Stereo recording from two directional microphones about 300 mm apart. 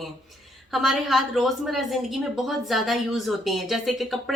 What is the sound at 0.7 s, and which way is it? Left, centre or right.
A woman's voice, centre.